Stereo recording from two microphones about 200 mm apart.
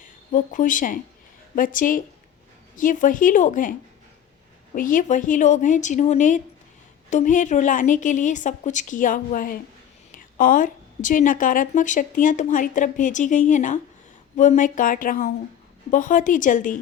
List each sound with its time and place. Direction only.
0.0 s a woman's voice: 40° left (ahead or behind)